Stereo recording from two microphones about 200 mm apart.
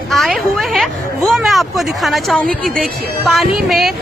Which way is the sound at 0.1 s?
Centre (ahead or behind).